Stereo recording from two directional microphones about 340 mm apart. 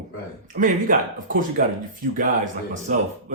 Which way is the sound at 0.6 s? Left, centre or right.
Right.